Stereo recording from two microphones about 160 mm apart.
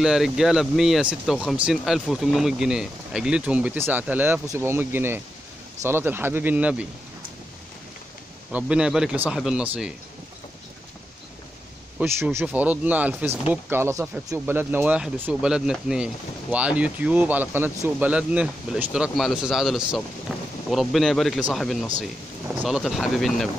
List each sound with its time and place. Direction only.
0.0 s speech: centre (ahead or behind)
8.5 s speech: 5° right (ahead or behind)
12.0 s speech: 15° right (ahead or behind)
20.3 s thunder: 5° right (ahead or behind)
20.7 s speech: centre (ahead or behind)